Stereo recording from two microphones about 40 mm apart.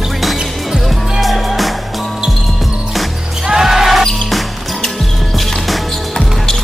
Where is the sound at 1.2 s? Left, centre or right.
Centre.